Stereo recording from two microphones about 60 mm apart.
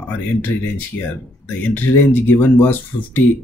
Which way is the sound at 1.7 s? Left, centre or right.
Left.